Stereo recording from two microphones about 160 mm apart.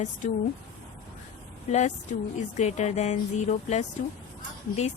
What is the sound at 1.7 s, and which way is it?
A woman's voice, 45° left (ahead or behind).